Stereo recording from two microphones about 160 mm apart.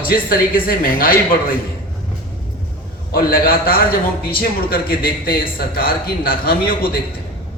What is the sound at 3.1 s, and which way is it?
A man's voice, 65° left (ahead or behind).